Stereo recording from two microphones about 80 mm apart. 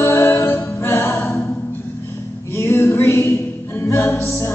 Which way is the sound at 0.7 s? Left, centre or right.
Left.